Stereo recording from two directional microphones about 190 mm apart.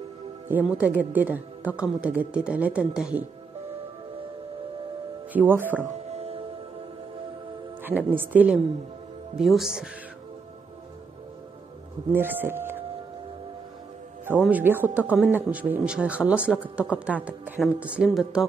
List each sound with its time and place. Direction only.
0.5 s a woman's voice: 10° right (ahead or behind)
5.3 s a woman's voice: 10° right (ahead or behind)
6.1 s music: 30° right (ahead or behind)
7.8 s a woman's voice: 10° right (ahead or behind)
12.1 s a woman's voice: 10° right (ahead or behind)
14.4 s a woman's voice: 10° right (ahead or behind)